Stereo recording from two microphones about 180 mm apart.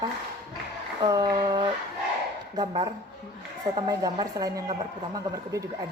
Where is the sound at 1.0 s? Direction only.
25° right (ahead or behind).